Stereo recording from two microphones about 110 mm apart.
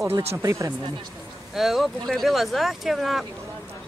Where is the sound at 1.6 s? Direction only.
Centre (ahead or behind).